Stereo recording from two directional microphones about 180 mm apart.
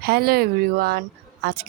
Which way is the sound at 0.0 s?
60° right (ahead or behind).